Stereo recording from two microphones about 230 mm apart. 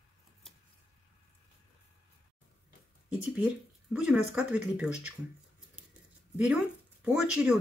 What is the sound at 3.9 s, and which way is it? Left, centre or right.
Speech, centre.